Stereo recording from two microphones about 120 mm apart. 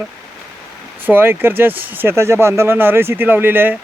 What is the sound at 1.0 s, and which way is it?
Speech, 20° right (ahead or behind).